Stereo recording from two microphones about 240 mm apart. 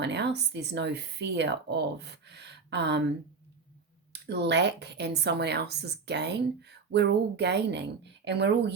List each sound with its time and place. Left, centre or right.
0.0 s speech: right
4.3 s speech: right